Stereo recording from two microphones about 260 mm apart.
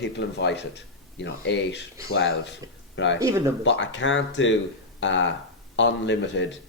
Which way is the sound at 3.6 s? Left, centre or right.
Left.